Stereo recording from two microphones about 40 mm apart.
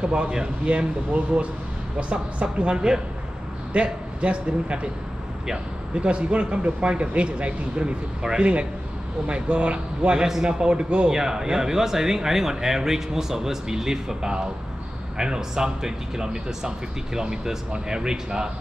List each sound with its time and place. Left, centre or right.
0.0 s a man's voice: right
5.9 s speech: right
8.2 s speech: centre
9.3 s speech: right
10.2 s speech: centre
11.1 s speech: centre